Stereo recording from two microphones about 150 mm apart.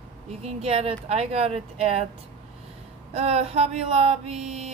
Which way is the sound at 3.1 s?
45° right (ahead or behind).